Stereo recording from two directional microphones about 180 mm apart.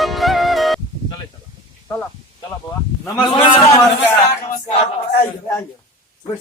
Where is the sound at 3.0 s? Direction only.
20° left (ahead or behind).